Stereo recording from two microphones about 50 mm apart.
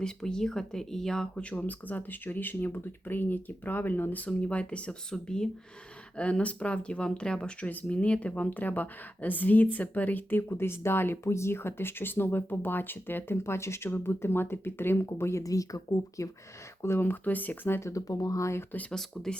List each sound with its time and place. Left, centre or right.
0.0 s speech: centre
1.5 s speech: left; by 5.5 s centre
6.1 s speech: left
7.6 s speech: left
17.0 s speech: left
17.7 s speech: left
18.9 s speech: centre